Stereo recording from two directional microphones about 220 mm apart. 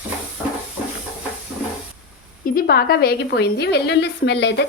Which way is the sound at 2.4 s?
40° left (ahead or behind).